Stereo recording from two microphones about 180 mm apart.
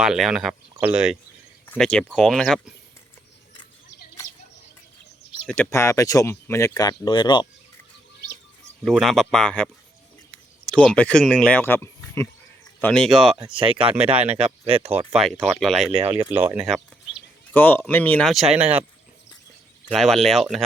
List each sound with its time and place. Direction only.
0.0 s speech: 5° right (ahead or behind)
1.6 s speech: 5° left (ahead or behind)
5.5 s speech: 10° left (ahead or behind)
8.8 s speech: centre (ahead or behind)
10.9 s speech: 5° left (ahead or behind)
13.6 s speech: 30° right (ahead or behind)
13.9 s speech: 10° right (ahead or behind)
14.4 s speech: 35° right (ahead or behind)
14.9 s speech: centre (ahead or behind)
16.0 s speech: 30° right (ahead or behind)
16.3 s speech: 10° right (ahead or behind)
16.6 s speech: centre (ahead or behind)
19.9 s speech: centre (ahead or behind)